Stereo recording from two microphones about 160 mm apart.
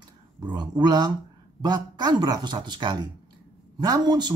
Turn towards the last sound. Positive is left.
turn(degrees=-25)  # may be behind; listen again after turning